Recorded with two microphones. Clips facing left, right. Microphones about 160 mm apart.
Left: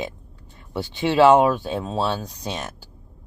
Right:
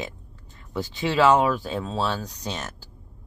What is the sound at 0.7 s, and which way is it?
Speech, 20° left (ahead or behind).